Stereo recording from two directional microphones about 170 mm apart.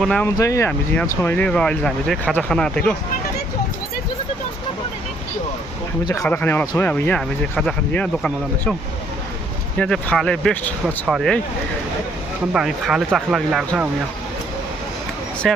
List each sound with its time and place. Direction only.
0.0 s speech: 5° left (ahead or behind)
0.3 s speech: 20° left (ahead or behind)
6.2 s speech: 10° left (ahead or behind)
9.7 s speech: 5° left (ahead or behind)
11.0 s speech: centre (ahead or behind)
12.5 s speech: centre (ahead or behind)
15.4 s speech: centre (ahead or behind)